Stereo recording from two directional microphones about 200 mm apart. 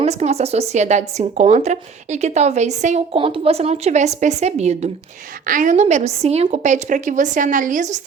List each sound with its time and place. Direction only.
0.0 s a woman's voice: 35° right (ahead or behind)